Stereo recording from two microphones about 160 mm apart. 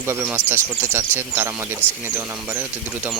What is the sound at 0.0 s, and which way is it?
Speech, 15° right (ahead or behind).